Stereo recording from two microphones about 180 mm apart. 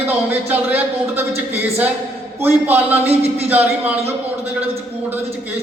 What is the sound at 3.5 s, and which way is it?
Speech, 10° right (ahead or behind).